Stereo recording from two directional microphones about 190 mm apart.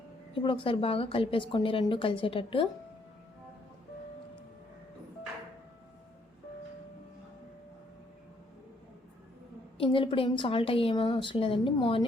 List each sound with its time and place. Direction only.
0.3 s a woman's voice: 25° left (ahead or behind)
9.7 s a woman's voice: 30° left (ahead or behind)